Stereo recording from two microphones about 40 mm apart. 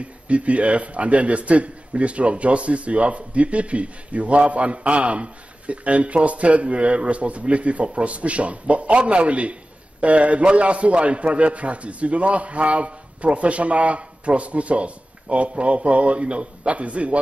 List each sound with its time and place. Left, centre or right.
0.0 s a man's voice: right